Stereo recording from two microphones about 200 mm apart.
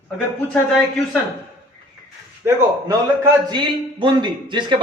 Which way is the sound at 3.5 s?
20° right (ahead or behind).